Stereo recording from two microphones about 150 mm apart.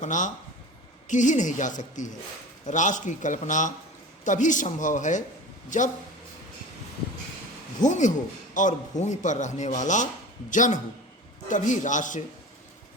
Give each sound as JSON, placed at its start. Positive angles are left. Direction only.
{"t": 0.0, "sound": "a woman's voice", "side_deg": 55}
{"t": 7.8, "sound": "a woman's voice", "side_deg": 55}